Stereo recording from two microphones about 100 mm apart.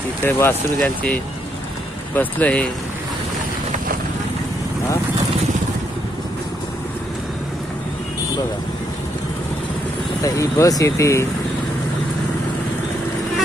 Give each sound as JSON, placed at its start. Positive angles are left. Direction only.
{"t": 0.3, "sound": "speech", "side_deg": 25}
{"t": 0.8, "sound": "speech", "side_deg": 10}
{"t": 10.2, "sound": "speech", "side_deg": 30}